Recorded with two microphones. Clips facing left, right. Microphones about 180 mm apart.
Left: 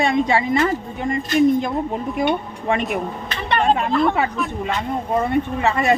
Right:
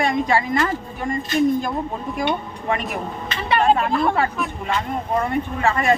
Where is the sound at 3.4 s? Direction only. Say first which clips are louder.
Right 1 dB; 10° right (ahead or behind).